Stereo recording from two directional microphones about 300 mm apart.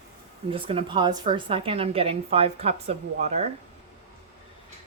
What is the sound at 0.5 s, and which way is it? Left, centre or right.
A woman's voice, centre.